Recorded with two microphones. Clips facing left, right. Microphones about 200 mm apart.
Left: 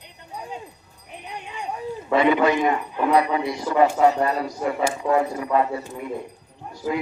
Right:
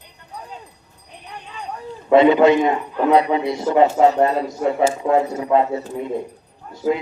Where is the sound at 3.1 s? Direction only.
25° right (ahead or behind).